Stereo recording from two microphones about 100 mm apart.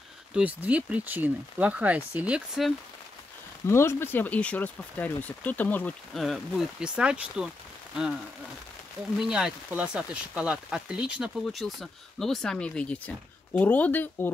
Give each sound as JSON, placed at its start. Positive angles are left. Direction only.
{"t": 0.3, "sound": "speech", "side_deg": -15}
{"t": 3.6, "sound": "speech", "side_deg": 25}
{"t": 6.1, "sound": "speech", "side_deg": 0}
{"t": 9.2, "sound": "speech", "side_deg": -5}
{"t": 11.6, "sound": "speech", "side_deg": 0}